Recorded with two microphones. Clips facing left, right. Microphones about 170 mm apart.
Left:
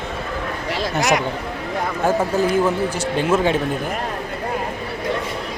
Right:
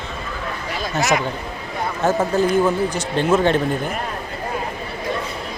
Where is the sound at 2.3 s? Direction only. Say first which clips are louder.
Right 1 dB; 10° left (ahead or behind).